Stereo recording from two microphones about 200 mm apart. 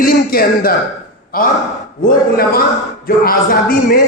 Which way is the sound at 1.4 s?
45° left (ahead or behind).